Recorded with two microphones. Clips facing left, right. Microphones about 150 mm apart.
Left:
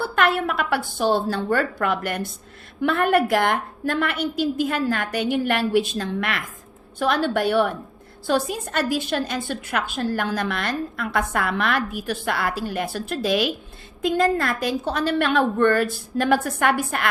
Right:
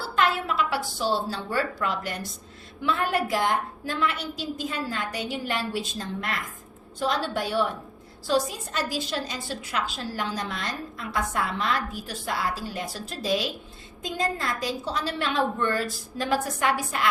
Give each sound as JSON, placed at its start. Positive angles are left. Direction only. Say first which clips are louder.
{"t": 0.0, "sound": "a woman's voice", "louder": "left 4 dB", "side_deg": 60}